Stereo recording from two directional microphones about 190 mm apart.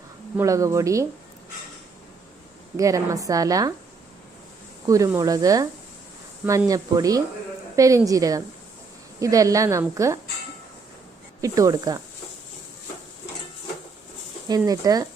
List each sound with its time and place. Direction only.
0.3 s a woman's voice: 15° right (ahead or behind)
2.7 s a woman's voice: 15° right (ahead or behind)
4.9 s a woman's voice: 15° right (ahead or behind)
11.3 s a woman's voice: 15° right (ahead or behind)
14.4 s speech: 20° right (ahead or behind)